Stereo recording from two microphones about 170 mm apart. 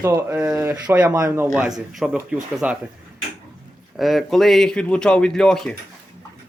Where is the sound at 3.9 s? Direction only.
Centre (ahead or behind).